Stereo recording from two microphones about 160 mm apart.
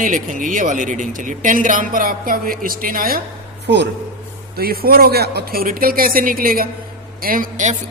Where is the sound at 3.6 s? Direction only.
90° right.